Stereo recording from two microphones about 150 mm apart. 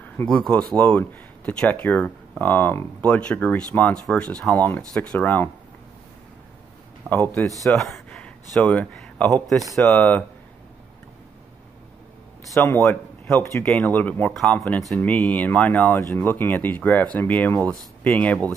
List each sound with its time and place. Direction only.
0.2 s speech: 5° left (ahead or behind)
7.1 s speech: 10° left (ahead or behind)
7.6 s a sound: centre (ahead or behind)
8.5 s speech: 10° left (ahead or behind)
12.5 s speech: 15° left (ahead or behind)